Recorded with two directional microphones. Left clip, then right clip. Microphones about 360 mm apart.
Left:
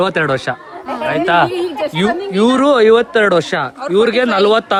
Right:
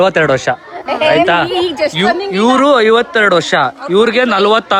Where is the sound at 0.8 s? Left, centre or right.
Right.